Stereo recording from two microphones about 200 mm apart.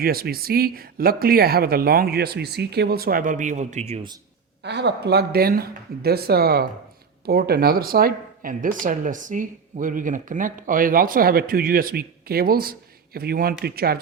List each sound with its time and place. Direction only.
0.0 s speech: 50° right (ahead or behind); by 4.1 s 30° right (ahead or behind)
4.6 s speech: 60° right (ahead or behind)